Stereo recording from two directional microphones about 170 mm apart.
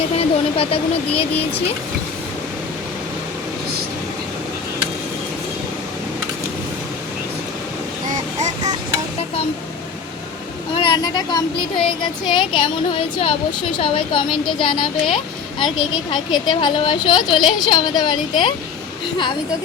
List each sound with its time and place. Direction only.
0.2 s a woman's voice: 35° left (ahead or behind)
8.4 s a sound: 45° right (ahead or behind)
10.8 s speech: 25° left (ahead or behind)